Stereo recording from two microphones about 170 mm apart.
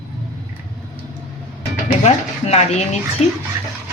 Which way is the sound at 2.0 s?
40° left (ahead or behind).